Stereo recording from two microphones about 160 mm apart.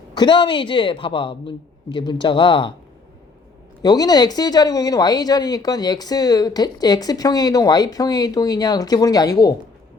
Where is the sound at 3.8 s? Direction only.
25° left (ahead or behind).